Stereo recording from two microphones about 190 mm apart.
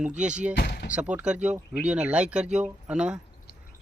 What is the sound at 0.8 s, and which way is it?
A man's voice, 5° right (ahead or behind).